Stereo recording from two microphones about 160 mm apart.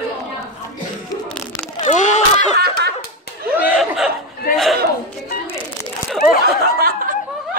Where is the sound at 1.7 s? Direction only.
50° left (ahead or behind).